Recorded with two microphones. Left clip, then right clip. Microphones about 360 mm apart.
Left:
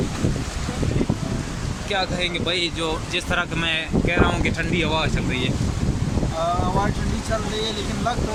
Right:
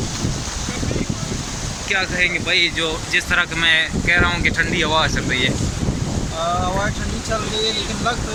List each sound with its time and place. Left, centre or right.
1.9 s speech: centre